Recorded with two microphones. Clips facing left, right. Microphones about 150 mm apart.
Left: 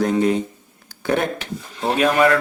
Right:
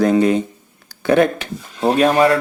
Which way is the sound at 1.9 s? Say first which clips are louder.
Right 2 dB; 35° right (ahead or behind).